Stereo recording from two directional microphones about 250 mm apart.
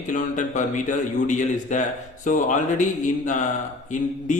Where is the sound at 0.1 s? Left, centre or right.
Left.